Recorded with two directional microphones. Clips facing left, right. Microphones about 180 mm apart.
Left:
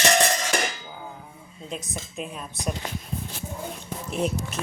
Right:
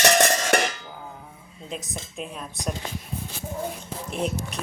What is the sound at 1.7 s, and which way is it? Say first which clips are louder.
Dishes: even; centre (ahead or behind).